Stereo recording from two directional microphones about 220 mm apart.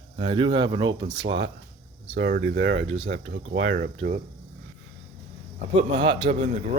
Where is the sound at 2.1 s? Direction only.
40° right (ahead or behind).